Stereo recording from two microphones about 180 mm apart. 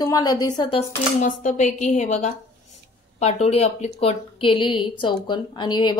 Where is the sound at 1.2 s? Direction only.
45° left (ahead or behind); by 5.9 s 25° left (ahead or behind).